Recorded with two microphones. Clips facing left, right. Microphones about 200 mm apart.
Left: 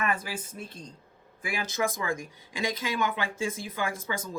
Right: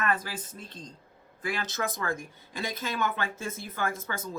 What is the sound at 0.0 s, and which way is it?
Speech, 10° left (ahead or behind).